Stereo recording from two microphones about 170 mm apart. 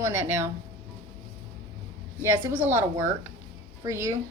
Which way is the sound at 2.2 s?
10° right (ahead or behind).